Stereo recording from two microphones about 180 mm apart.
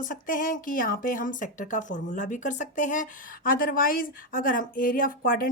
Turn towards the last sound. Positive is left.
turn(degrees=50)  # may be behind; listen again after turning